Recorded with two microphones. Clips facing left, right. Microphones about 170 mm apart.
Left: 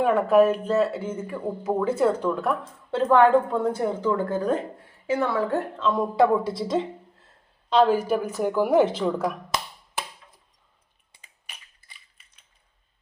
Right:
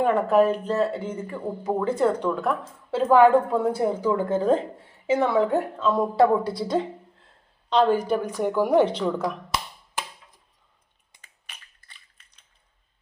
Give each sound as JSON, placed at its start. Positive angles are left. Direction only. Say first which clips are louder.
{"t": 0.0, "sound": "a woman's voice", "louder": "left 1 dB", "side_deg": 5}
{"t": 11.4, "sound": "crushing", "louder": "left 1 dB", "side_deg": 10}